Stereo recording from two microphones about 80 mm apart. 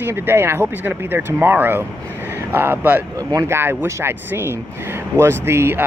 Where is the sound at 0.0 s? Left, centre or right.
Right.